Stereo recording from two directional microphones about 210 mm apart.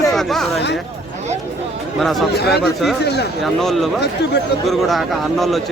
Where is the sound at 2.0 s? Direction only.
Centre (ahead or behind).